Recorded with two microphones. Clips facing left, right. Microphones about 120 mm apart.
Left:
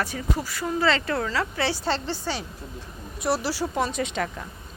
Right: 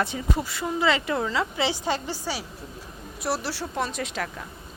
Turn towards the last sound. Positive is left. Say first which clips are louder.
# left 3 dB
turn(degrees=0)  # may be behind; listen again after turning